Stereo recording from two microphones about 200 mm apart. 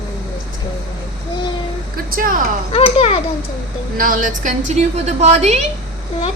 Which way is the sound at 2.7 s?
30° left (ahead or behind).